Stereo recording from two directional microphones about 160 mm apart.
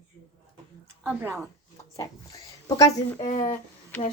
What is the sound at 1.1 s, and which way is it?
Speech, 15° right (ahead or behind).